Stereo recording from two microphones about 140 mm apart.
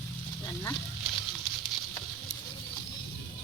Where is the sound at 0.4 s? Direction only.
20° left (ahead or behind).